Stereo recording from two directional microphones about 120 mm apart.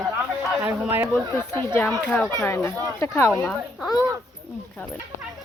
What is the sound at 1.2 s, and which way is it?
Speech, 35° right (ahead or behind).